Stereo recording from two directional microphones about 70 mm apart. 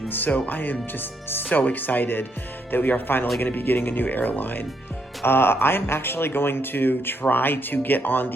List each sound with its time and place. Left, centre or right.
0.1 s speech: left